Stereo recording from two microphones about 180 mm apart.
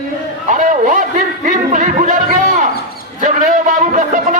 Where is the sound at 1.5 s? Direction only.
45° right (ahead or behind).